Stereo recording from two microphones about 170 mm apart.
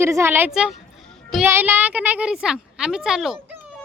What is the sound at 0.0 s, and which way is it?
Speech, 15° right (ahead or behind).